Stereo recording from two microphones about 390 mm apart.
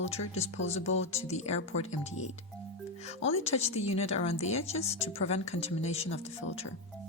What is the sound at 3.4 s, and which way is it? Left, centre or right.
Speech, centre.